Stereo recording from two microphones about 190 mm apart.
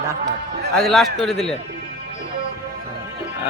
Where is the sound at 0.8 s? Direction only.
Centre (ahead or behind).